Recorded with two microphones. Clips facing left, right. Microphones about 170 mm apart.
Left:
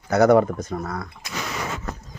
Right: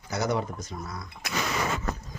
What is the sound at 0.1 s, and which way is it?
Speech, 55° left (ahead or behind).